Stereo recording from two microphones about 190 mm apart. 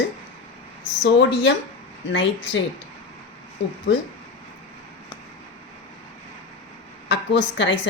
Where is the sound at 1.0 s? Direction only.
75° left (ahead or behind).